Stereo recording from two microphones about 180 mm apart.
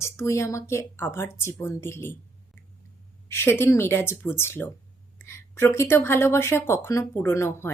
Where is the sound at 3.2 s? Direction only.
15° left (ahead or behind).